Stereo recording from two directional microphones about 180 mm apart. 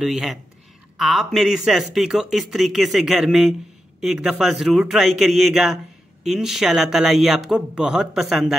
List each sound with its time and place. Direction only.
0.0 s speech: centre (ahead or behind)